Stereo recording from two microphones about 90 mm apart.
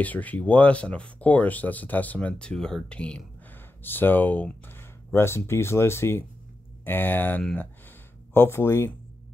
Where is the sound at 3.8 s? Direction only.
20° left (ahead or behind).